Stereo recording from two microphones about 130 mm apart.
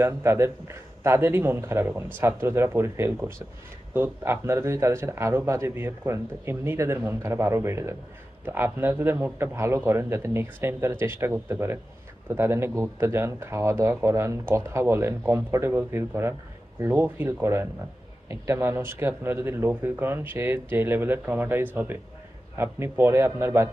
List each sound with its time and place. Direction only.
0.0 s a man's voice: 20° right (ahead or behind)